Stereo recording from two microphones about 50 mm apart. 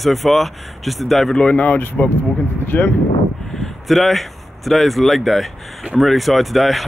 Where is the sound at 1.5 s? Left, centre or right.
Left.